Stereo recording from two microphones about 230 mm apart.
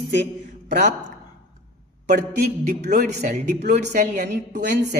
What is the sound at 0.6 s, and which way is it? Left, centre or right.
Speech, right.